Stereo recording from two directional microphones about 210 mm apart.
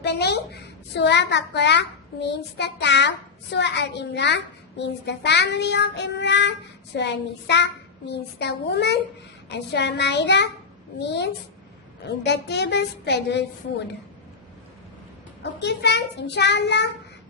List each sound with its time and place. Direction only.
0.0 s a child's voice: 50° left (ahead or behind)
3.5 s child singing: 55° left (ahead or behind)
6.9 s a child's voice: 55° left (ahead or behind)
9.5 s child singing: 55° left (ahead or behind)
12.0 s a child's voice: 55° left (ahead or behind)
15.6 s child singing: 55° left (ahead or behind)